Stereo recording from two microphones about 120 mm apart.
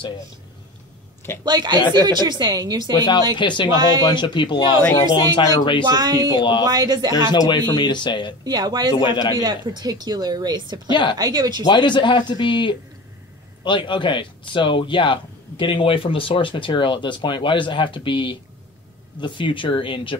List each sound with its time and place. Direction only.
1.4 s speech: 35° right (ahead or behind)
3.3 s speech: 40° left (ahead or behind)
5.9 s speech: 35° right (ahead or behind)
7.2 s speech: 40° left (ahead or behind)
8.5 s speech: 35° right (ahead or behind)
9.0 s speech: 35° left (ahead or behind)
9.4 s speech: 35° right (ahead or behind)
10.9 s speech: 40° left (ahead or behind)
11.1 s speech: 30° right (ahead or behind)
11.6 s speech: 40° left (ahead or behind)